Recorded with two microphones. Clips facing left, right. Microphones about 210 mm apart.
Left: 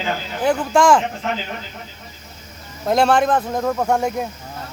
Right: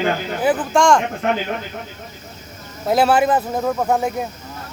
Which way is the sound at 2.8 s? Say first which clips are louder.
Right 1 dB; 5° right (ahead or behind).